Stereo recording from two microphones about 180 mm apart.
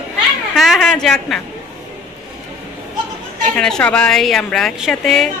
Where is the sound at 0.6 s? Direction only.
Centre (ahead or behind).